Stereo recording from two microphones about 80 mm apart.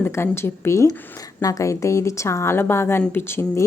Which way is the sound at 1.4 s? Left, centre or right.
Left.